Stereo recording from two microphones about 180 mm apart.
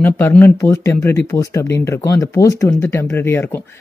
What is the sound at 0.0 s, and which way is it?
Speech, 10° left (ahead or behind).